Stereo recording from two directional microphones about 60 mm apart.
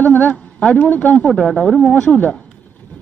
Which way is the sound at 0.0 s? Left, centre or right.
Left.